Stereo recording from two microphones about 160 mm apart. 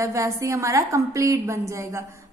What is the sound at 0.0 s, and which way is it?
A woman's voice, 20° right (ahead or behind).